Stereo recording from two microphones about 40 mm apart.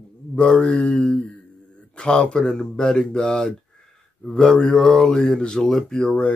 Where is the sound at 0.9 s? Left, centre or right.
Left.